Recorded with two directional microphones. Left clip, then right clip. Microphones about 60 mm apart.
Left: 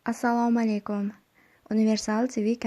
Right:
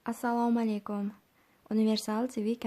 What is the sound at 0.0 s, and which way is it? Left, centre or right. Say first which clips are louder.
Speech: left 5 dB; left.